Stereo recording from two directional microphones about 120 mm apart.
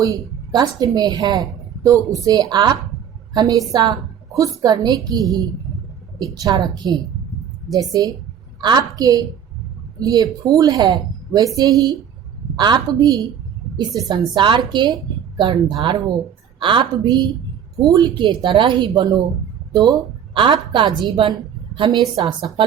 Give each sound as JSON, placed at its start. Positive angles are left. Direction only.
{"t": 0.0, "sound": "a woman's voice", "side_deg": -30}
{"t": 6.7, "sound": "a woman's voice", "side_deg": -35}